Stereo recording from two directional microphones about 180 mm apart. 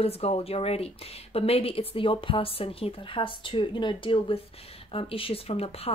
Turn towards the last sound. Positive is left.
turn(degrees=35)  # may be behind; listen again after turning